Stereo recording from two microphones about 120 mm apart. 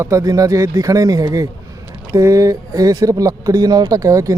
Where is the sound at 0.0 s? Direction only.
25° right (ahead or behind).